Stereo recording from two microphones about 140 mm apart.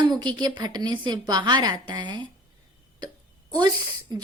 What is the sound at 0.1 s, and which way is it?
Speech, 30° right (ahead or behind).